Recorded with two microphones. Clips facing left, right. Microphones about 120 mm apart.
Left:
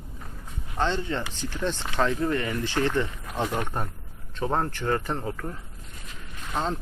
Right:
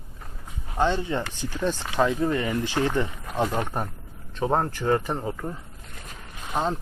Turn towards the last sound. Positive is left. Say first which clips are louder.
# right 2 dB
turn(degrees=-15)  # may be behind; listen again after turning